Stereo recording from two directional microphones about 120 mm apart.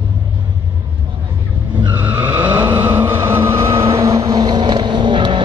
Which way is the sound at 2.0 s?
15° right (ahead or behind).